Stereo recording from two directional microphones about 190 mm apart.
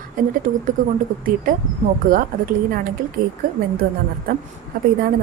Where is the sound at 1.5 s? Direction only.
50° right (ahead or behind).